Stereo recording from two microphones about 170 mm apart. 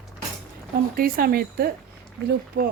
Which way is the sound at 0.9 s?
60° right (ahead or behind).